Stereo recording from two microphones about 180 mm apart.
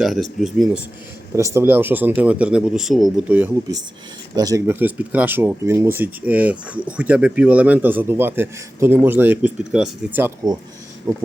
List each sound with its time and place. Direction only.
0.0 s speech: centre (ahead or behind)
1.4 s speech: 15° right (ahead or behind)
4.4 s speech: 20° right (ahead or behind)